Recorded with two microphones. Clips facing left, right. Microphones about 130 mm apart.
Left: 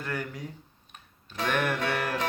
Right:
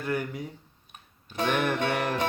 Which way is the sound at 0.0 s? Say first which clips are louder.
Right 4 dB; 15° right (ahead or behind).